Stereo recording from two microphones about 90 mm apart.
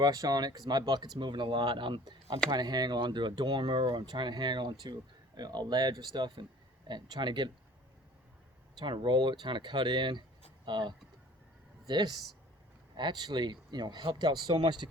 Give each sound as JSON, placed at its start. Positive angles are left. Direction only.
{"t": 0.0, "sound": "speech", "side_deg": -45}
{"t": 1.2, "sound": "speech", "side_deg": -60}
{"t": 2.5, "sound": "speech", "side_deg": -50}
{"t": 8.8, "sound": "speech", "side_deg": -60}
{"t": 11.9, "sound": "speech", "side_deg": -50}